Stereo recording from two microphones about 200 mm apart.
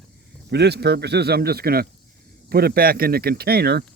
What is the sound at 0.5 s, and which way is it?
A man's voice, 55° right (ahead or behind).